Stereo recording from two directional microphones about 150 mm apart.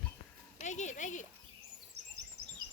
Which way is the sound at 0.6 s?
50° left (ahead or behind).